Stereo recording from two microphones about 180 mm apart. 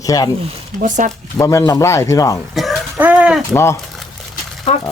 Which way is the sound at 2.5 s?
Centre (ahead or behind).